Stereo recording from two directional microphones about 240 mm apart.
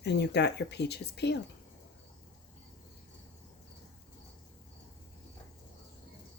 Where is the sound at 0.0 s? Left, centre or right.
Left.